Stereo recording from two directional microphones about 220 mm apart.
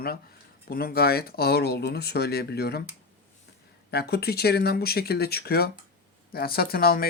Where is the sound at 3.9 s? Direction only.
45° left (ahead or behind).